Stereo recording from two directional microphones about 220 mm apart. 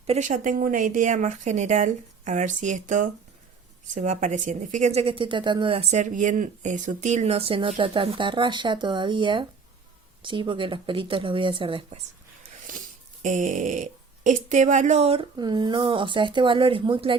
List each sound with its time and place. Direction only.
0.1 s a woman's voice: 35° right (ahead or behind)
12.6 s a woman's voice: 35° right (ahead or behind)